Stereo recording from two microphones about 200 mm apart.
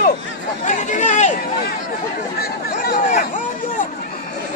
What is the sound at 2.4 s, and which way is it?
Chatter, 50° left (ahead or behind).